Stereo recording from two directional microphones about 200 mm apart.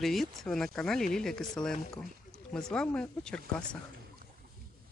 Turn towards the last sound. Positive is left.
turn(degrees=5)  # may be behind; listen again after turning